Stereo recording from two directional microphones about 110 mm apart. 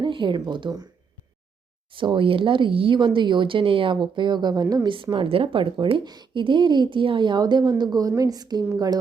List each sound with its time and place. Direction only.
0.0 s speech: 45° right (ahead or behind)
1.9 s speech: 50° right (ahead or behind); by 4.9 s 35° right (ahead or behind)
5.1 s a woman's voice: 50° right (ahead or behind)